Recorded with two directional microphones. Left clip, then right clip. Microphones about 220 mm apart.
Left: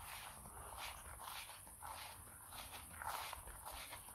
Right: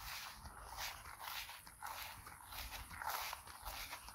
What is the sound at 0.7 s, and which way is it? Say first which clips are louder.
Dog: right 4 dB; 45° right (ahead or behind).